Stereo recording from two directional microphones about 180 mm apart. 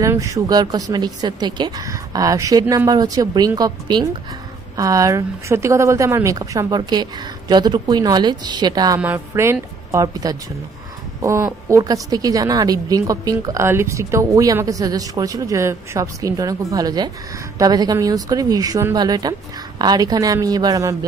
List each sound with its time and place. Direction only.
0.0 s a woman's voice: 15° right (ahead or behind)